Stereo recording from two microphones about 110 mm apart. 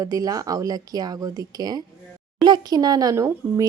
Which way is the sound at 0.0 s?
35° right (ahead or behind).